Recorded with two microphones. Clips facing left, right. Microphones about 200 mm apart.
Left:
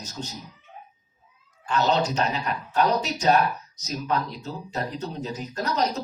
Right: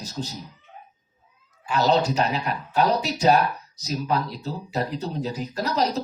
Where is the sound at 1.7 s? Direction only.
5° right (ahead or behind).